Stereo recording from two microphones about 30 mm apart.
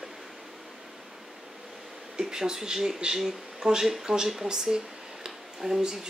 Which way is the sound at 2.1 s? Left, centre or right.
Right.